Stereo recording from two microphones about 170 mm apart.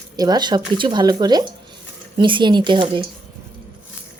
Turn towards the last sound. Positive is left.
turn(degrees=-30)  # may be behind; listen again after turning